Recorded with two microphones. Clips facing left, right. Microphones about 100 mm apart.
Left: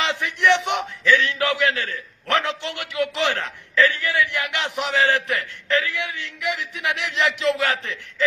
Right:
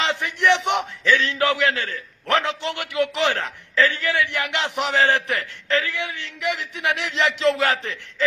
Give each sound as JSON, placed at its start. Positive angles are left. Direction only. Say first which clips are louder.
{"t": 0.0, "sound": "a man's voice", "louder": "even", "side_deg": -20}